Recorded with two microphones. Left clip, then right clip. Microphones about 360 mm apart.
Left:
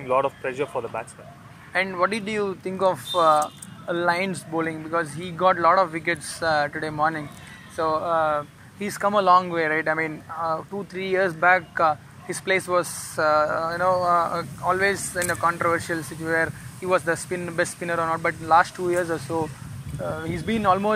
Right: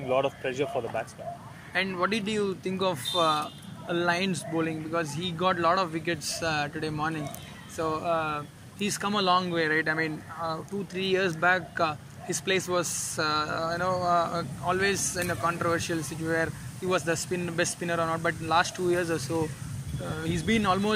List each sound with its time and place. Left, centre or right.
0.7 s speech: left
1.7 s speech: centre